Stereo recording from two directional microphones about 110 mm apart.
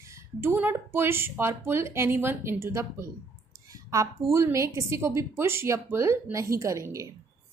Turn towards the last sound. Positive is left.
turn(degrees=-30)  # may be behind; listen again after turning